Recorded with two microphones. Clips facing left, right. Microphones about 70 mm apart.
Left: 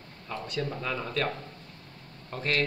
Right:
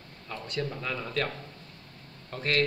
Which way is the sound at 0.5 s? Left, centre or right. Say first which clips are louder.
Even; centre.